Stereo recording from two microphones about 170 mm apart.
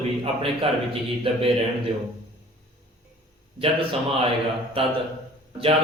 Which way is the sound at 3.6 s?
35° right (ahead or behind).